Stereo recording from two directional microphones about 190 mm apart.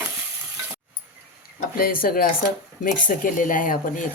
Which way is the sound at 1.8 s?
50° left (ahead or behind).